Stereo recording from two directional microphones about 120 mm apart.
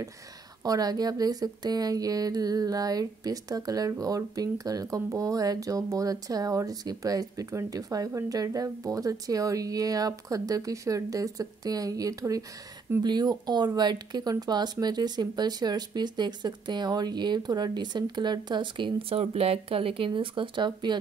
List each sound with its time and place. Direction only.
0.7 s speech: 30° right (ahead or behind)